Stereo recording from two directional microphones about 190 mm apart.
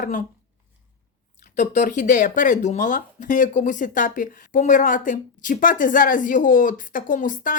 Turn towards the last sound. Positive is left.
turn(degrees=45)  # may be behind; listen again after turning